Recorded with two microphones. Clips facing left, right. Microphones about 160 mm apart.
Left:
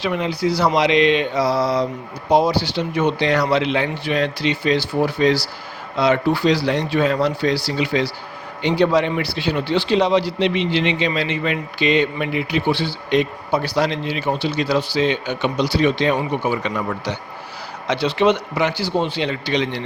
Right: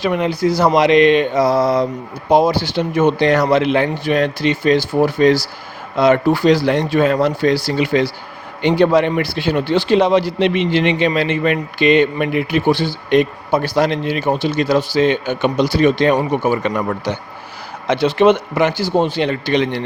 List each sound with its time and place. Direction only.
0.0 s a man's voice: 50° right (ahead or behind)